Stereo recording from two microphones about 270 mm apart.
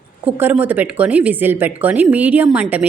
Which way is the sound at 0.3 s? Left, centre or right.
Centre.